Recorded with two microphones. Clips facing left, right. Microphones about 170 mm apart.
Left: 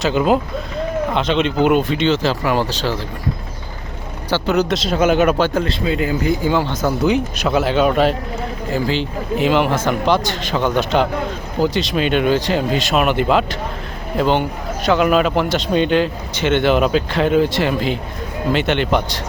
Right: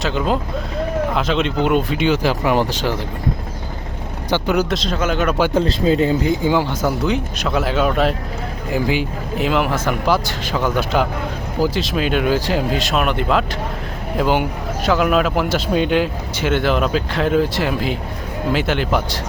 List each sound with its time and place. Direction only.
0.0 s a man's voice: 5° left (ahead or behind)
2.0 s speech: 10° right (ahead or behind)
4.3 s speech: 10° right (ahead or behind)
4.7 s a man's voice: centre (ahead or behind)
4.9 s speech: 15° left (ahead or behind)
5.8 s speech: 35° right (ahead or behind)
6.2 s speech: 15° right (ahead or behind)
7.0 s a man's voice: 10° left (ahead or behind)
8.7 s speech: 10° right (ahead or behind)
9.4 s a man's voice: centre (ahead or behind)